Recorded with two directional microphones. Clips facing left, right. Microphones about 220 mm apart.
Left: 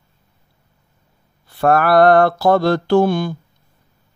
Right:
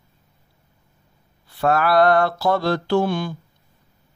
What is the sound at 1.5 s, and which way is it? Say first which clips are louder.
Mantra: left 4 dB; 50° left (ahead or behind).